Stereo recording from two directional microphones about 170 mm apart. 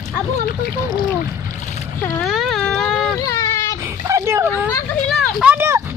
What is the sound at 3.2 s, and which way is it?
Baby cry, 20° left (ahead or behind).